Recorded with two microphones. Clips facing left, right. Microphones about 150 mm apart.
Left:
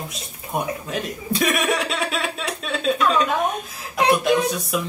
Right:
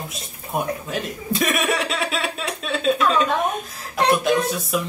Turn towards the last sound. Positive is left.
turn(degrees=0)  # may be behind; listen again after turning